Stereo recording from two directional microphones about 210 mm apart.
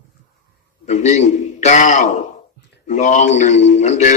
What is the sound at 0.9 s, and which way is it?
A man's voice, 35° left (ahead or behind).